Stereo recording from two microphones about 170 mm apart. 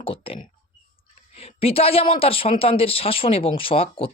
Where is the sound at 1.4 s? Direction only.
35° left (ahead or behind).